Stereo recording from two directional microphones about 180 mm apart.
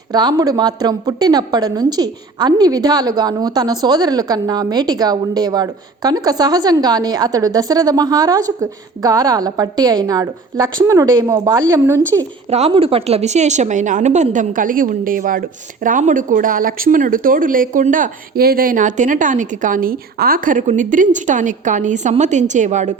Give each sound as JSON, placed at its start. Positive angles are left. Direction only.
{"t": 0.1, "sound": "a woman's voice", "side_deg": -25}
{"t": 12.5, "sound": "a woman's voice", "side_deg": -35}